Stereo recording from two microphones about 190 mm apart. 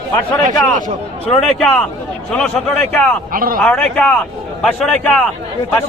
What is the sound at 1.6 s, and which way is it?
A man's voice, 5° left (ahead or behind).